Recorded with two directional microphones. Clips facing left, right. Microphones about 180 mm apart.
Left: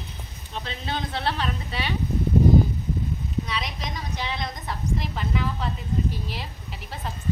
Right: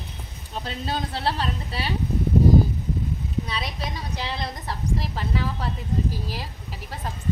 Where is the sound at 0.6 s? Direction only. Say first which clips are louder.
Right 2 dB; 35° right (ahead or behind).